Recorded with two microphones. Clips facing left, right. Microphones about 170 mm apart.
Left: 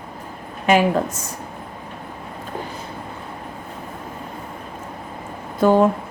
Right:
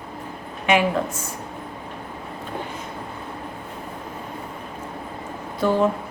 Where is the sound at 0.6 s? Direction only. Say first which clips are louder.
Left 3 dB; 40° left (ahead or behind).